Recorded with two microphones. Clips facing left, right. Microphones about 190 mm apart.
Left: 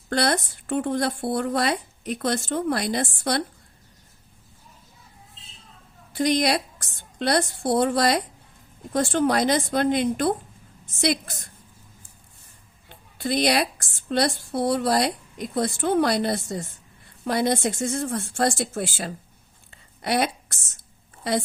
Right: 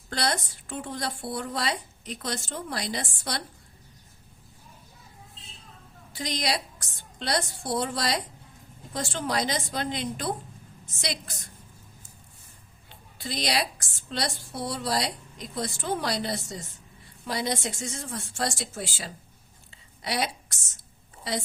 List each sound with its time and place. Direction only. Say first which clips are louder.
0.1 s a woman's voice: left 6 dB; 55° left (ahead or behind)
6.1 s a woman's voice: left 9 dB; 55° left (ahead or behind)
12.9 s a woman's voice: left 10 dB; 55° left (ahead or behind)
19.7 s a sound: left 7 dB; 55° left (ahead or behind)